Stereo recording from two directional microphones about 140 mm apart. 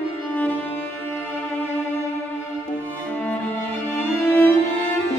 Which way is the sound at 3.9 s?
10° left (ahead or behind).